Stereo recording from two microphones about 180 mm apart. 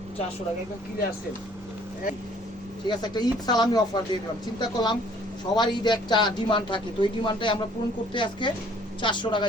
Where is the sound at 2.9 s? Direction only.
20° left (ahead or behind).